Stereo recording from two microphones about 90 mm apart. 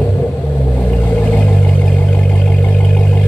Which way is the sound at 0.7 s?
15° left (ahead or behind).